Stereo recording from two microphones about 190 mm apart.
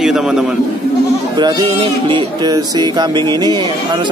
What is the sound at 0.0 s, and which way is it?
Speech, centre (ahead or behind).